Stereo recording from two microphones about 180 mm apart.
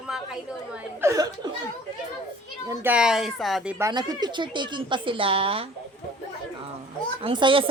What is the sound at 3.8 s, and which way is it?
Speech, 20° right (ahead or behind).